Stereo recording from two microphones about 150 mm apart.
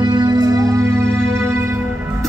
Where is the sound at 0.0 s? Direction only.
25° right (ahead or behind).